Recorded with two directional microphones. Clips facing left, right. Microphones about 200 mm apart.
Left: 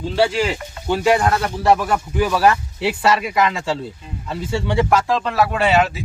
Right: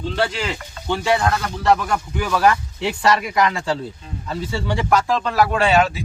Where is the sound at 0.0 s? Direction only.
10° left (ahead or behind).